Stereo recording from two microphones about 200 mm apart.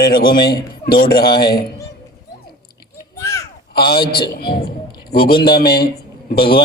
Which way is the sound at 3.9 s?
20° left (ahead or behind).